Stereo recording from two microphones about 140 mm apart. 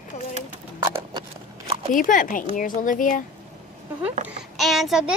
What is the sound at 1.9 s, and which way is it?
A woman's voice, 70° left (ahead or behind).